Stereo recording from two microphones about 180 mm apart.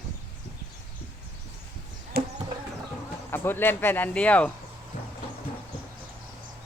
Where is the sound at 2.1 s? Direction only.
60° right (ahead or behind).